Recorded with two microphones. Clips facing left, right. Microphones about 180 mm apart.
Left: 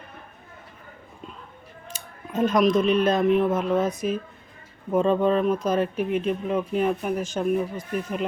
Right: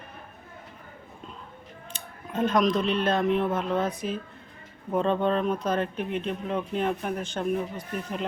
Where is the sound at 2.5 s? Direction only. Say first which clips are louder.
Left 4 dB; 10° left (ahead or behind).